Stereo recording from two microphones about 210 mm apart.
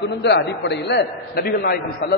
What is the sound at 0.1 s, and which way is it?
A man's voice, 55° left (ahead or behind).